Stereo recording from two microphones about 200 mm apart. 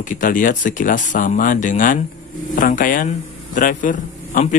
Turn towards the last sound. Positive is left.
turn(degrees=40)  # may be behind; listen again after turning